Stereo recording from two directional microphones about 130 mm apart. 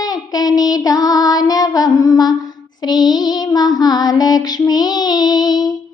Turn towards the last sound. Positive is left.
turn(degrees=30)  # may be behind; listen again after turning